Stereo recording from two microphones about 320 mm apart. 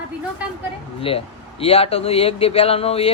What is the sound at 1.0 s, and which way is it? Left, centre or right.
Speech, centre.